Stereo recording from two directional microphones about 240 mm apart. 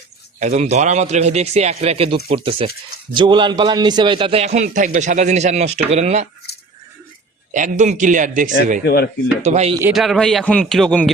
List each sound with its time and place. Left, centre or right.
0.3 s a man's voice: right
7.5 s speech: right
8.8 s speech: left
9.4 s a man's voice: right
9.8 s a man's voice: centre